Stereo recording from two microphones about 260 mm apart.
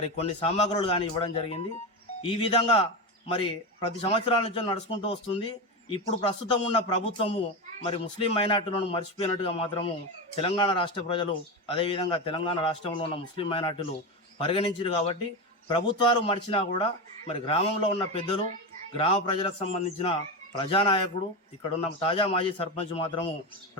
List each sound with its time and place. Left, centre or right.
0.2 s a man's voice: left